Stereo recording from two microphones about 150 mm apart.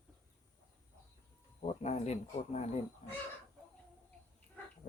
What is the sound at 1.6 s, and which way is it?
Speech, 50° left (ahead or behind).